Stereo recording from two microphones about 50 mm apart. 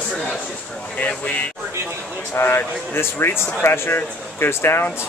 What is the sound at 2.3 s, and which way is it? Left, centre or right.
Speech, left.